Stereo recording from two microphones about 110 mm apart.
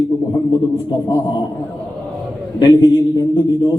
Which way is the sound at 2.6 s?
40° left (ahead or behind).